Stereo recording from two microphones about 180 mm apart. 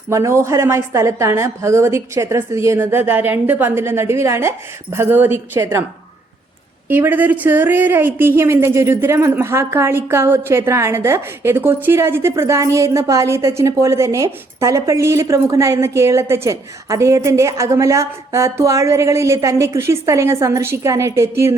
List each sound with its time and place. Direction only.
0.1 s a woman's voice: 15° right (ahead or behind)
6.8 s a woman's voice: 10° right (ahead or behind)